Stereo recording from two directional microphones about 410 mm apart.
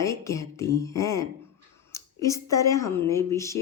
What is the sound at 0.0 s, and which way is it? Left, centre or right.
Speech, centre.